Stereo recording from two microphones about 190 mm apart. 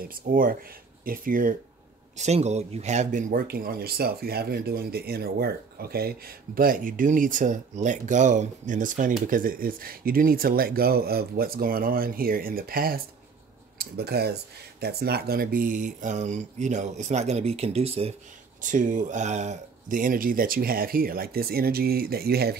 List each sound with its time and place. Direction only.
0.0 s speech: 50° right (ahead or behind)
2.1 s speech: 35° right (ahead or behind)
18.6 s speech: 40° right (ahead or behind)